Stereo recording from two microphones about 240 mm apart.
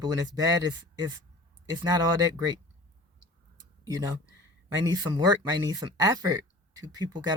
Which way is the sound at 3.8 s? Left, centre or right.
Centre.